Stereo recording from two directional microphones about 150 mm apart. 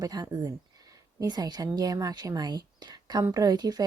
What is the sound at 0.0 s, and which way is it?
A woman's voice, 25° right (ahead or behind).